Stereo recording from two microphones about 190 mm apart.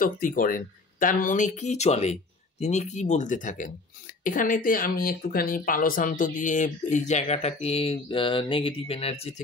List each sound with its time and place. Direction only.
0.0 s speech: 45° left (ahead or behind); by 9.3 s 30° left (ahead or behind)